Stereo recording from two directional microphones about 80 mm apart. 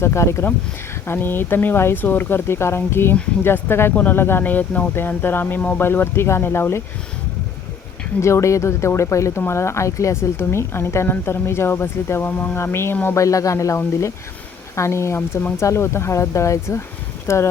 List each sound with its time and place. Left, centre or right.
0.0 s a woman's voice: left
8.2 s a woman's voice: left
13.1 s a woman's voice: left